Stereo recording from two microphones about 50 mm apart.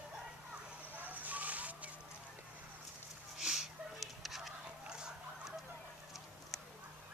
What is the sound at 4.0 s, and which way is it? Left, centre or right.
Fowl, centre.